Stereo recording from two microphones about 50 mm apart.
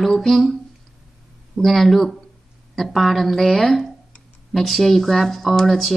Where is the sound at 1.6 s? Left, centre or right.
Centre.